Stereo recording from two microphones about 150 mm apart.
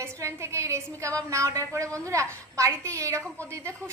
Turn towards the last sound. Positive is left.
turn(degrees=-20)  # may be behind; listen again after turning